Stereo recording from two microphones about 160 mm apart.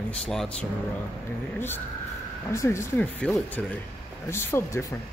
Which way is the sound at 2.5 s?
15° left (ahead or behind).